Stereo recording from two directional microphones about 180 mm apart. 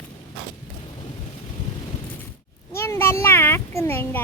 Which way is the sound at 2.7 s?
15° left (ahead or behind).